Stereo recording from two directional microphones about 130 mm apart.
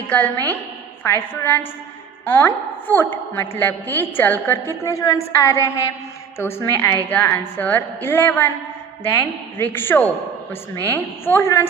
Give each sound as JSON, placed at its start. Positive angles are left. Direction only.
{"t": 0.1, "sound": "a woman's voice", "side_deg": 10}